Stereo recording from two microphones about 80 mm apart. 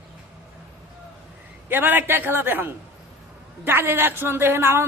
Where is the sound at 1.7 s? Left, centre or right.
Right.